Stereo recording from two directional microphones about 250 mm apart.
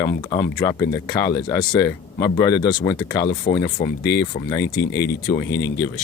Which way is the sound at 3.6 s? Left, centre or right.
Left.